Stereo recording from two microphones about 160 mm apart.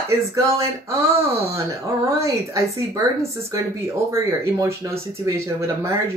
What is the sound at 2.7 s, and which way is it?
Speech, 20° right (ahead or behind).